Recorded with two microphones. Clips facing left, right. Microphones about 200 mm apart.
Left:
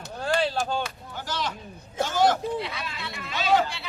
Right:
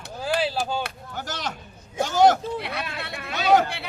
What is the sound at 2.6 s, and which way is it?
Speech, 60° right (ahead or behind).